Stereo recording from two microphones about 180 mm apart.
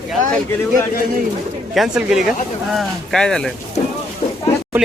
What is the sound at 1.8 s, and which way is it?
Speech, 5° right (ahead or behind).